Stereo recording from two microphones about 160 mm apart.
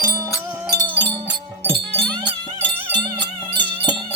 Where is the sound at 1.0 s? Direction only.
30° right (ahead or behind).